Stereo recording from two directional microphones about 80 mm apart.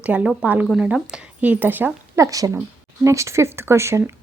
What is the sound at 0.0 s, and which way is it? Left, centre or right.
Speech, centre.